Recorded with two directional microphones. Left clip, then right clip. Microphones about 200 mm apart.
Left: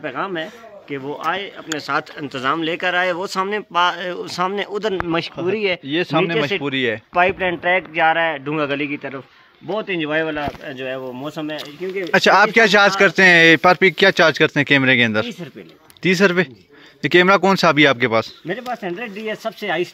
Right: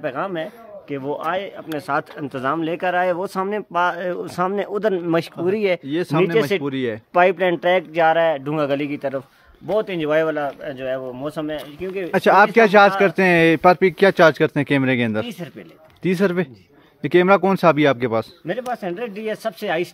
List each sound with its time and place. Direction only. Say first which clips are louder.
0.0 s speech: even; 55° right (ahead or behind)
1.8 s speech: even; 55° right (ahead or behind)
5.9 s speech: left 1 dB; 10° right (ahead or behind)
7.2 s speech: right 2 dB; 70° right (ahead or behind)
9.7 s speech: right 2 dB; 50° right (ahead or behind)
10.3 s speech: right 1 dB; 20° right (ahead or behind)
12.1 s speech: left 1 dB; 5° right (ahead or behind)
18.7 s speech: even; 15° right (ahead or behind)